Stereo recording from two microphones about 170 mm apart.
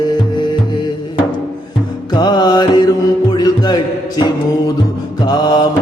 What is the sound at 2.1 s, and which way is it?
Music, 25° left (ahead or behind).